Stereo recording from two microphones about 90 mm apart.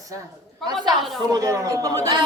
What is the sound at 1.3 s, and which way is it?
Speech, 40° right (ahead or behind).